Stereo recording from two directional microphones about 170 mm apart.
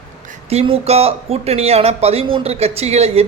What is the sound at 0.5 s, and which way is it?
Speech, 35° right (ahead or behind).